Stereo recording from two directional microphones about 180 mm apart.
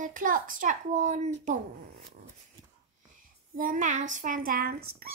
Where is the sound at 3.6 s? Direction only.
50° right (ahead or behind).